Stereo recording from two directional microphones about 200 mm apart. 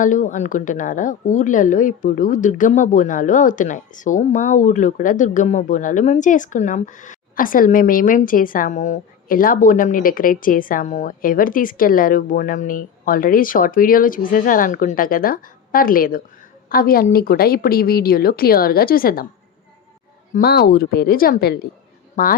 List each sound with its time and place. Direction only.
0.0 s a woman's voice: 40° left (ahead or behind)
20.3 s a woman's voice: 50° left (ahead or behind)